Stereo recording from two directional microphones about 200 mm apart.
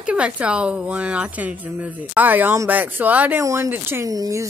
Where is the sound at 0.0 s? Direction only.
5° right (ahead or behind).